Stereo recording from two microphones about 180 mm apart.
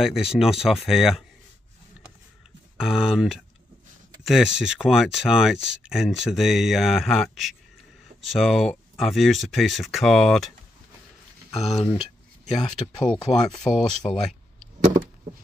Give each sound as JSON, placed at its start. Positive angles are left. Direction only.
{"t": 0.0, "sound": "speech", "side_deg": -5}
{"t": 2.8, "sound": "speech", "side_deg": 0}
{"t": 11.5, "sound": "speech", "side_deg": 35}
{"t": 12.8, "sound": "speech", "side_deg": 5}